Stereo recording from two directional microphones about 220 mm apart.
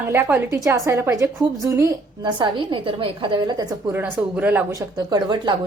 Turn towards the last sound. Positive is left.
turn(degrees=-20)  # may be behind; listen again after turning